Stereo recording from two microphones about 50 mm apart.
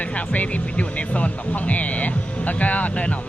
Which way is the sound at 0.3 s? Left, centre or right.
Left.